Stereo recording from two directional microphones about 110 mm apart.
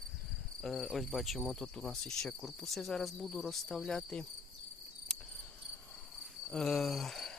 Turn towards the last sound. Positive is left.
turn(degrees=5)  # may be behind; listen again after turning